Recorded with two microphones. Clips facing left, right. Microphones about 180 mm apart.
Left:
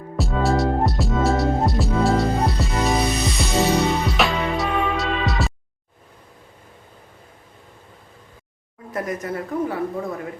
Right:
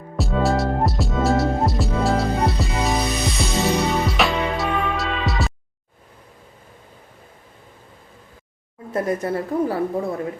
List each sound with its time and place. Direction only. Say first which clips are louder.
0.2 s music: even; centre (ahead or behind)
8.9 s a woman's voice: right 4 dB; 30° right (ahead or behind)